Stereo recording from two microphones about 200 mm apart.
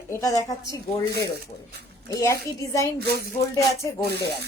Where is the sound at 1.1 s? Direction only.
55° left (ahead or behind).